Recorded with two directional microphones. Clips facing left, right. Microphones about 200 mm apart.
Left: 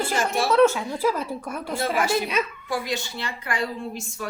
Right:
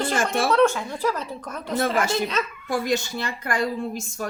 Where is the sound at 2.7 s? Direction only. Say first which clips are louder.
Right 4 dB; 45° right (ahead or behind).